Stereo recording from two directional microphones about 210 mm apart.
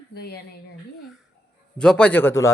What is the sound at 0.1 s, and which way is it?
Speech, 50° left (ahead or behind).